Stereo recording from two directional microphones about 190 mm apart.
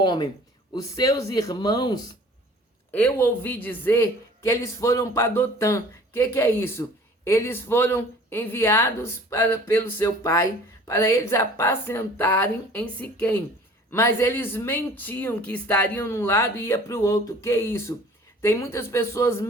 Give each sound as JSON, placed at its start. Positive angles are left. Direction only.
{"t": 0.0, "sound": "speech", "side_deg": 25}
{"t": 2.9, "sound": "speech", "side_deg": 10}